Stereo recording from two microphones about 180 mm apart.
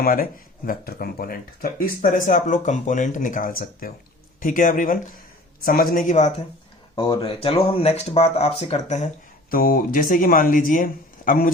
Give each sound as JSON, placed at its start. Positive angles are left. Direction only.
{"t": 0.0, "sound": "speech", "side_deg": 50}
{"t": 6.9, "sound": "speech", "side_deg": 25}
{"t": 9.5, "sound": "speech", "side_deg": 50}